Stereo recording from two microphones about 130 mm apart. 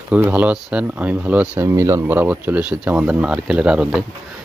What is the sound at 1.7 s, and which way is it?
Speech, 25° right (ahead or behind).